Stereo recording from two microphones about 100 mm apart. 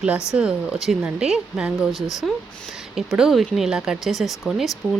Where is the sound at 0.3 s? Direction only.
10° right (ahead or behind).